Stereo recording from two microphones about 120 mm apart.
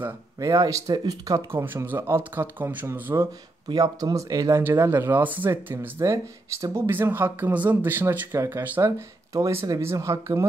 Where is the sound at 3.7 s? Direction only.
35° right (ahead or behind).